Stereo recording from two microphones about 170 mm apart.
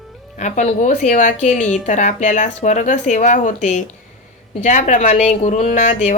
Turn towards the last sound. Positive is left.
turn(degrees=45)  # may be behind; listen again after turning